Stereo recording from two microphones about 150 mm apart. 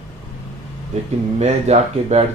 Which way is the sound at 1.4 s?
45° right (ahead or behind).